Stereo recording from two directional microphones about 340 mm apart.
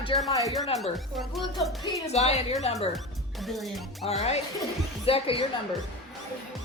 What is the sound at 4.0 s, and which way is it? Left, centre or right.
Speech, centre.